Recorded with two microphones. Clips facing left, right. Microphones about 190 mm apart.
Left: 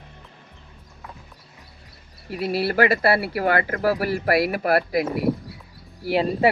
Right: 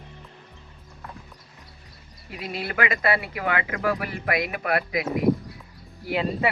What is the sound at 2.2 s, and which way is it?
Speech, 5° left (ahead or behind).